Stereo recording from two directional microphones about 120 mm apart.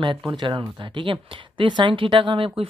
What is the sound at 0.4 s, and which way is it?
Speech, 40° right (ahead or behind).